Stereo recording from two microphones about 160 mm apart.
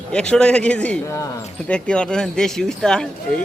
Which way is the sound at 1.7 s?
5° left (ahead or behind).